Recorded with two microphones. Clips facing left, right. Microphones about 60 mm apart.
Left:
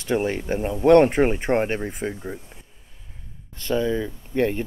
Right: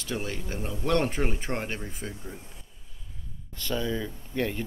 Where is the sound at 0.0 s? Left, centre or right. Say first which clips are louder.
Left 10 dB; left.